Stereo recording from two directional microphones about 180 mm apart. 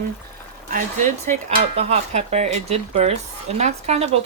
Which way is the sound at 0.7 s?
45° right (ahead or behind).